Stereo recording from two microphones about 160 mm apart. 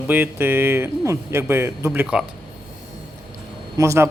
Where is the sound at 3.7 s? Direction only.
20° right (ahead or behind).